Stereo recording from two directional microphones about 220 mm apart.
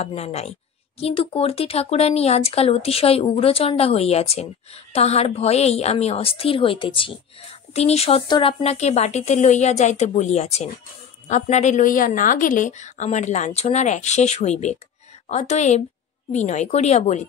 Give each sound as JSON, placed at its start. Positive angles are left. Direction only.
{"t": 0.0, "sound": "a woman's voice", "side_deg": 30}